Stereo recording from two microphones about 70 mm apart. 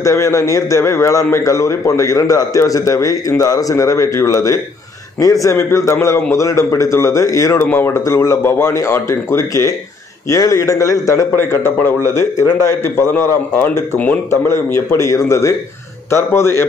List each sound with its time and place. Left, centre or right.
0.0 s a man's voice: left
7.6 s a man's voice: left
11.3 s a man's voice: left